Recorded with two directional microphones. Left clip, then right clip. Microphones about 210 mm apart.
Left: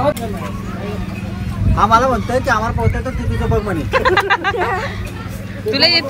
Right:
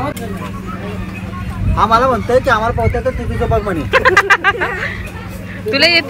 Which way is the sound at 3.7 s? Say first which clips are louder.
Right 4 dB; 10° left (ahead or behind).